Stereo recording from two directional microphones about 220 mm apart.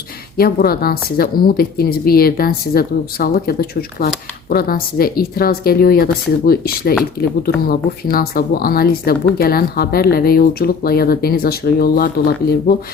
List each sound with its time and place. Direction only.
0.3 s a woman's voice: 45° left (ahead or behind)